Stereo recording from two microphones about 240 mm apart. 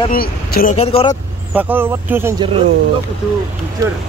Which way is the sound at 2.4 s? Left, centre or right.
Right.